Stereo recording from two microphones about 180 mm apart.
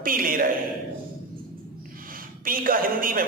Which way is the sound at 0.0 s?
50° right (ahead or behind).